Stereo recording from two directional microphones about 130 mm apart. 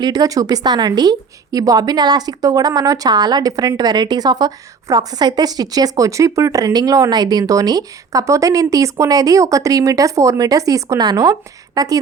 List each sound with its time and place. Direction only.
0.0 s a woman's voice: 30° right (ahead or behind)